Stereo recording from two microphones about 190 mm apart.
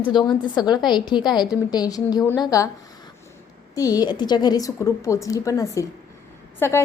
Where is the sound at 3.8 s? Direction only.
20° left (ahead or behind).